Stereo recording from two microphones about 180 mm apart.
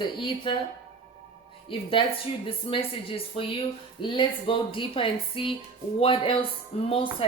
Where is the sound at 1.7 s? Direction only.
30° left (ahead or behind).